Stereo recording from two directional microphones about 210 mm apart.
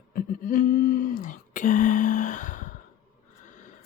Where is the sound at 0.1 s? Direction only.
40° left (ahead or behind).